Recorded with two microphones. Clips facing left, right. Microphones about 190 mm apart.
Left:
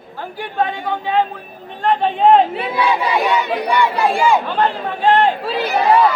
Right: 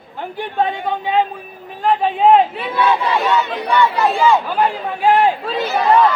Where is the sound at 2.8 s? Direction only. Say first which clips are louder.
Right 1 dB; 15° left (ahead or behind).